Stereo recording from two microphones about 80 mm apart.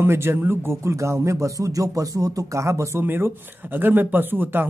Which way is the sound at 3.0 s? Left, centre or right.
Right.